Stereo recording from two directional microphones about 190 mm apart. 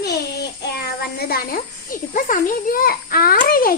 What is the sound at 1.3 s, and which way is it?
A child's voice, 50° left (ahead or behind).